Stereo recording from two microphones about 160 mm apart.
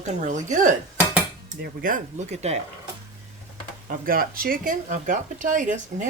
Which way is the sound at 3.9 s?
60° right (ahead or behind).